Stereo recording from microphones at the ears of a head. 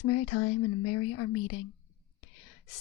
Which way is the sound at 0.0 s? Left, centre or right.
Left.